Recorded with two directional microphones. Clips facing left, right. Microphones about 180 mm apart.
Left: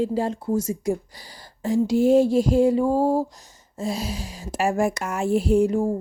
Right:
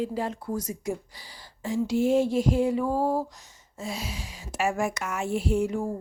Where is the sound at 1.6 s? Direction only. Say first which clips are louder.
Left 5 dB; 40° left (ahead or behind).